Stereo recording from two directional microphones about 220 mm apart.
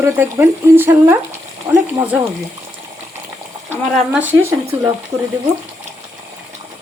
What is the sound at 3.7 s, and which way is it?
Speech, 10° right (ahead or behind).